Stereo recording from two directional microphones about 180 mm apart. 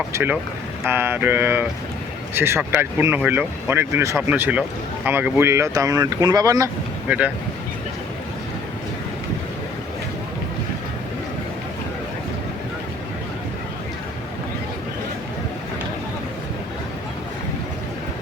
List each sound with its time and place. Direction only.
0.1 s speech: 10° right (ahead or behind)